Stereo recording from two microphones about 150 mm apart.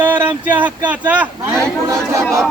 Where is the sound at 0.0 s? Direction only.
10° right (ahead or behind).